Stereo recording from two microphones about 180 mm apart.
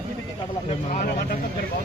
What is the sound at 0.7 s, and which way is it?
Speech, 40° left (ahead or behind).